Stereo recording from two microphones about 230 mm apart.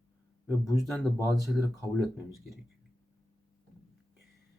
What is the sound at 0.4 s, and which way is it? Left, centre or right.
Speech, centre.